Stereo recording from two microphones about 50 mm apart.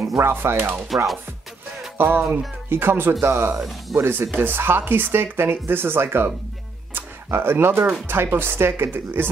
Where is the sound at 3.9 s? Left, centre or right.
Right.